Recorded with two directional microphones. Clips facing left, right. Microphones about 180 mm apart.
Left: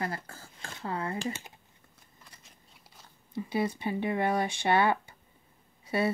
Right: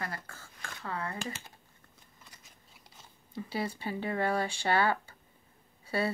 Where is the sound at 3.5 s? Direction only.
20° left (ahead or behind).